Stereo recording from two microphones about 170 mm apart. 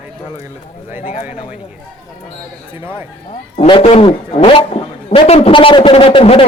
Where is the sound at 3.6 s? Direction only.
30° left (ahead or behind).